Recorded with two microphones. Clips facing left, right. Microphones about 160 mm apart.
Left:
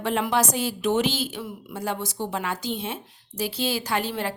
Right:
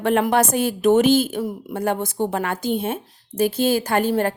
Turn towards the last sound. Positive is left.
turn(degrees=-50)  # may be behind; listen again after turning